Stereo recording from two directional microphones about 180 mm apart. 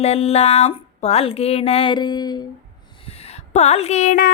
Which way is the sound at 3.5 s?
40° left (ahead or behind).